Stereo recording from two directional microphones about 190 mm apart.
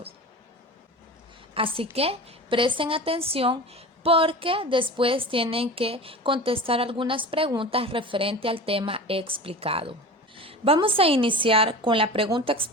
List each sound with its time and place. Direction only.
1.5 s a woman's voice: 30° right (ahead or behind)